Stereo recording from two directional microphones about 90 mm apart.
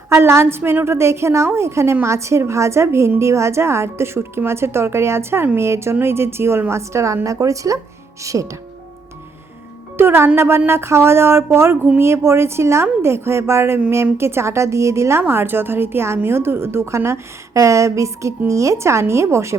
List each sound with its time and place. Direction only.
0.1 s a woman's voice: 30° right (ahead or behind)
10.0 s a woman's voice: 25° right (ahead or behind)